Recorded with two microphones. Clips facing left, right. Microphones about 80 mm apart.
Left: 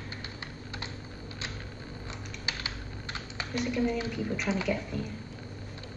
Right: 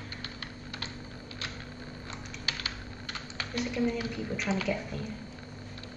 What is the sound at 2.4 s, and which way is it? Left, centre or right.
Typing, left.